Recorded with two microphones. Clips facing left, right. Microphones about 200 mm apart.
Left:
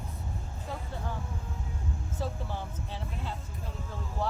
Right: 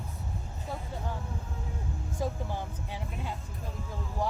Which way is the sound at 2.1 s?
15° right (ahead or behind).